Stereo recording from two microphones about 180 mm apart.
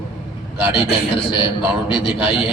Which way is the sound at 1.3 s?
25° left (ahead or behind).